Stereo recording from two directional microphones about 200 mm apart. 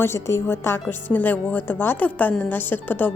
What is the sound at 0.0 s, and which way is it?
Speech, 15° left (ahead or behind).